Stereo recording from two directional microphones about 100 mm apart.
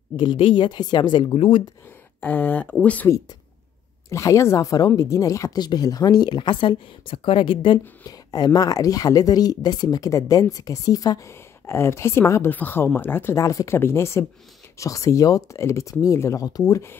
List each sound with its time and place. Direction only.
0.1 s speech: 50° left (ahead or behind)
1.3 s speech: 70° left (ahead or behind)
2.1 s speech: 20° left (ahead or behind)
4.1 s speech: 30° left (ahead or behind); by 7.8 s 55° left (ahead or behind)
8.1 s speech: 40° left (ahead or behind); by 13.4 s 20° left (ahead or behind)
13.4 s speech: 35° left (ahead or behind)